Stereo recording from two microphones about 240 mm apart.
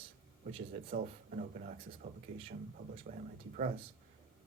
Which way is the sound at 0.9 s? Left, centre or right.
Right.